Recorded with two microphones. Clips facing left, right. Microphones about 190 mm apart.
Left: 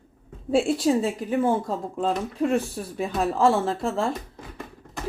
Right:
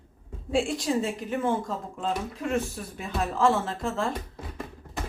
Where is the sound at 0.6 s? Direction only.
35° left (ahead or behind).